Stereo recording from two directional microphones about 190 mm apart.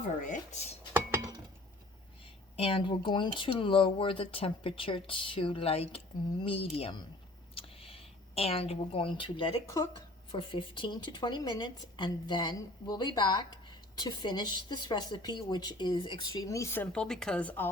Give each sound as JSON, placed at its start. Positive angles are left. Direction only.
{"t": 0.2, "sound": "speech", "side_deg": 40}
{"t": 2.6, "sound": "a woman's voice", "side_deg": 30}